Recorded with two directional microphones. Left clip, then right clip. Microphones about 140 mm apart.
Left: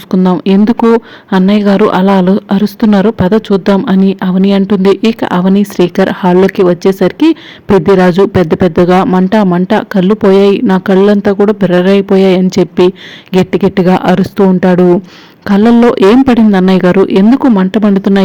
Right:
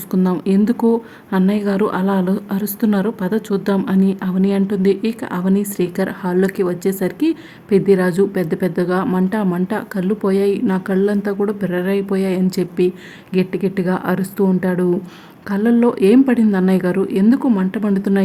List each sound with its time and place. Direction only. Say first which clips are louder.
0.1 s speech: left 9 dB; 40° left (ahead or behind)